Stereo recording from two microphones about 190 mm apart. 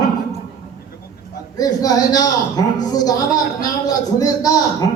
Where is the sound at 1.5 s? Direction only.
20° left (ahead or behind).